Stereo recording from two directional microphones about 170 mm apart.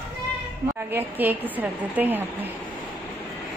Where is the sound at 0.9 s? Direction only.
10° right (ahead or behind).